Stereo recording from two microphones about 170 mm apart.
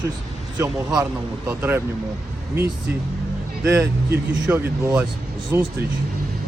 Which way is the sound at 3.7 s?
10° right (ahead or behind).